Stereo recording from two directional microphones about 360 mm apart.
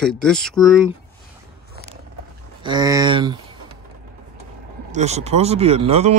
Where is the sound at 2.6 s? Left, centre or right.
Centre.